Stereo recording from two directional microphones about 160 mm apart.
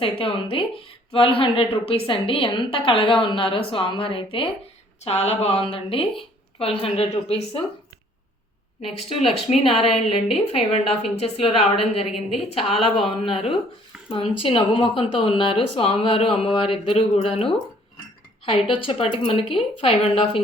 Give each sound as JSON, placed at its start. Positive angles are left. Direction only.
{"t": 0.0, "sound": "speech", "side_deg": 35}
{"t": 9.0, "sound": "speech", "side_deg": 35}
{"t": 18.5, "sound": "speech", "side_deg": 35}